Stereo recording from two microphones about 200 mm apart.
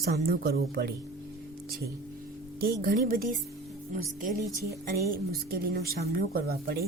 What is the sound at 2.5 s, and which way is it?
Speech, 50° right (ahead or behind).